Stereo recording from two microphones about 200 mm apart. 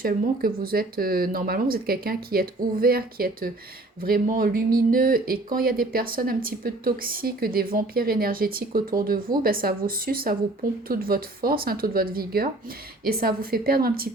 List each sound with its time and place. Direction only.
0.0 s speech: 45° right (ahead or behind)